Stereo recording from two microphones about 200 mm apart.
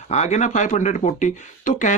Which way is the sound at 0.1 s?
35° left (ahead or behind).